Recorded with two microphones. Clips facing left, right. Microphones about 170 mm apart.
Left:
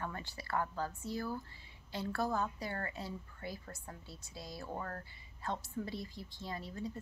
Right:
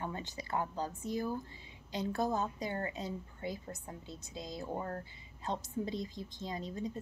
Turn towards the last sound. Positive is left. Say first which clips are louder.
# right 3 dB
turn(degrees=-20)  # may be behind; listen again after turning